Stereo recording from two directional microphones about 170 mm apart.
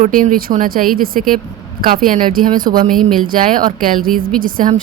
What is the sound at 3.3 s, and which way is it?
Speech, 55° right (ahead or behind).